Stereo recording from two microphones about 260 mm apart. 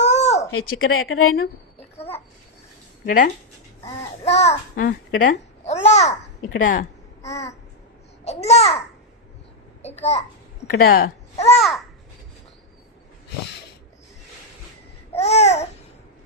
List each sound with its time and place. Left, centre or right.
0.0 s a sound: left
0.7 s speech: left
3.1 s a child's voice: left
7.2 s babbling: centre
8.2 s a child's voice: left
9.8 s a child's voice: left
10.8 s a child's voice: left
15.1 s babbling: left